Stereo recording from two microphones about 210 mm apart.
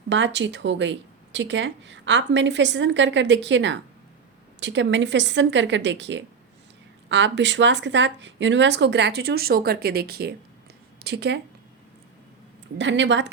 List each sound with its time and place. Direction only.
0.1 s speech: 60° right (ahead or behind)
12.8 s speech: 60° right (ahead or behind)